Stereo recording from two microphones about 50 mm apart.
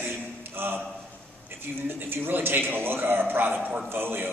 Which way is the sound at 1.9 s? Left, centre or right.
Right.